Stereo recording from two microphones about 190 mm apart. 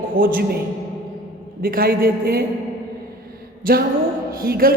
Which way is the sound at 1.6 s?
50° right (ahead or behind).